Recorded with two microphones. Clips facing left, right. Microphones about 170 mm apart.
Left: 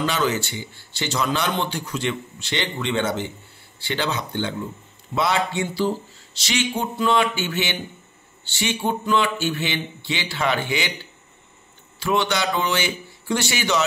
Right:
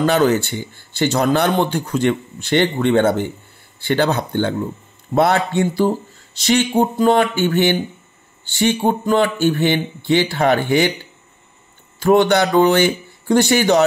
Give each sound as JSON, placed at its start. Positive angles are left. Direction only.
{"t": 0.0, "sound": "speech", "side_deg": -55}
{"t": 12.0, "sound": "speech", "side_deg": -50}